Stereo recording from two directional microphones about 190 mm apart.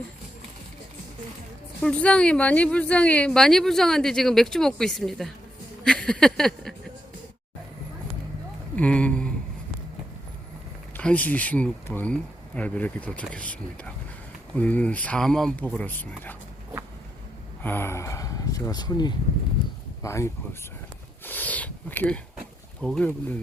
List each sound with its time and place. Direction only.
1.8 s a woman's voice: 5° left (ahead or behind)
5.8 s a sound: 5° left (ahead or behind)
8.7 s speech: 5° left (ahead or behind)
10.9 s speech: 10° left (ahead or behind)
17.6 s a woman's voice: 10° left (ahead or behind)